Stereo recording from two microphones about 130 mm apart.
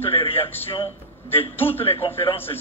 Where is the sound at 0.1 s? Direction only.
45° left (ahead or behind).